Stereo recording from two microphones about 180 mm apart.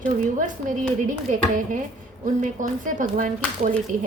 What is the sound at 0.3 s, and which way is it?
Speech, 45° right (ahead or behind).